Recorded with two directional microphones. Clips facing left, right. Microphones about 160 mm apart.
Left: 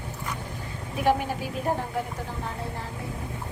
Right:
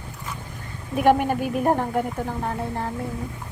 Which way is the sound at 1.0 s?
55° right (ahead or behind).